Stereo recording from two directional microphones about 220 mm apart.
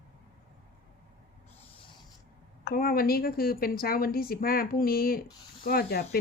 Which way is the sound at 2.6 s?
40° left (ahead or behind).